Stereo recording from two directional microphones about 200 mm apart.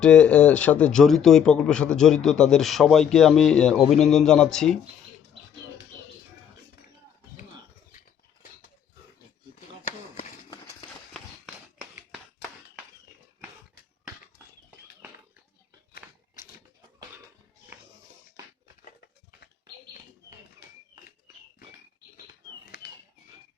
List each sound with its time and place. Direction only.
0.0 s a man's voice: 5° left (ahead or behind)
9.8 s a sound: 35° left (ahead or behind)
10.5 s run: 20° left (ahead or behind)
11.1 s run: centre (ahead or behind)
16.0 s crumpling: 40° left (ahead or behind)